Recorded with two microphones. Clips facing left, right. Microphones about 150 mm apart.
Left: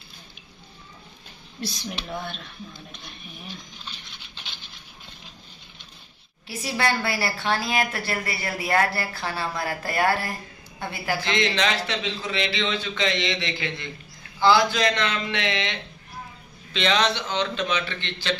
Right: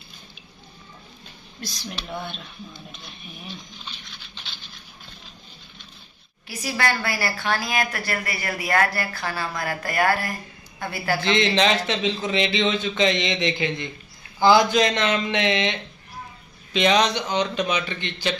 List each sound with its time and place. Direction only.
2.0 s speech: centre (ahead or behind)
6.4 s speech: 25° left (ahead or behind)
11.1 s speech: 20° right (ahead or behind)
16.7 s speech: 15° right (ahead or behind)